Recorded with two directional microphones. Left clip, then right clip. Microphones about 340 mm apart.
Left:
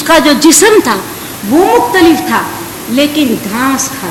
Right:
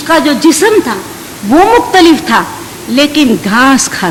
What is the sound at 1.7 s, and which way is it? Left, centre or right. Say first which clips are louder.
Speech: even; right.